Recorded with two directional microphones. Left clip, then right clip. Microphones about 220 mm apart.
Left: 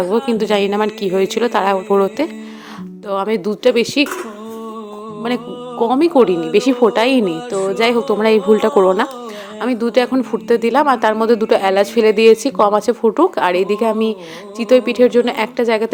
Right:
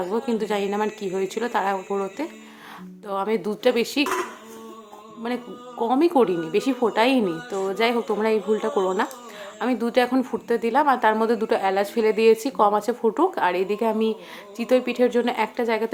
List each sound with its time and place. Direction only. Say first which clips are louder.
0.0 s a woman's voice: left 9 dB; 35° left (ahead or behind)
5.2 s speech: left 8 dB; 30° left (ahead or behind)
9.6 s a woman's voice: left 6 dB; 25° left (ahead or behind)